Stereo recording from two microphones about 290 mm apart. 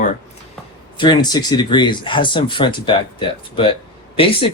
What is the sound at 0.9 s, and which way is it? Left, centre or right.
Speech, centre.